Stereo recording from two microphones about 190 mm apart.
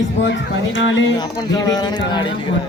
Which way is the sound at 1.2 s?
20° left (ahead or behind).